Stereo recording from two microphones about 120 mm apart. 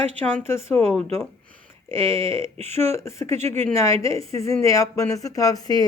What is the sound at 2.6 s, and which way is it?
Speech, 20° left (ahead or behind).